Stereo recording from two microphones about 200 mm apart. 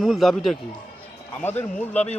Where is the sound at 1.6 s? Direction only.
5° left (ahead or behind).